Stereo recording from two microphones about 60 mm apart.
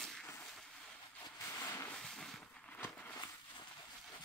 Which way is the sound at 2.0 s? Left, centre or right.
Centre.